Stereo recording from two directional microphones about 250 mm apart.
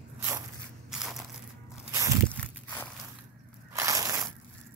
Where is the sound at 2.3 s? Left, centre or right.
Centre.